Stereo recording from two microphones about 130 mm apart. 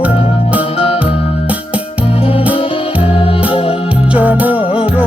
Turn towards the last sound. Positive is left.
turn(degrees=-10)  # may be behind; listen again after turning